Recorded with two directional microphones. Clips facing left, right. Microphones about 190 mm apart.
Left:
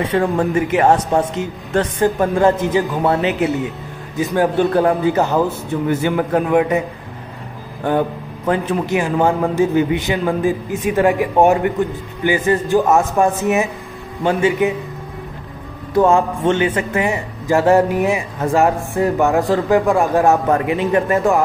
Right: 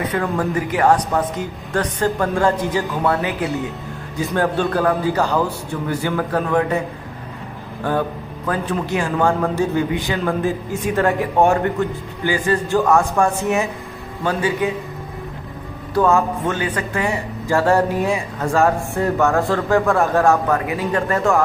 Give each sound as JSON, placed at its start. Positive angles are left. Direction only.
{"t": 0.0, "sound": "speech", "side_deg": 25}
{"t": 7.8, "sound": "a man's voice", "side_deg": 20}
{"t": 15.9, "sound": "a man's voice", "side_deg": 25}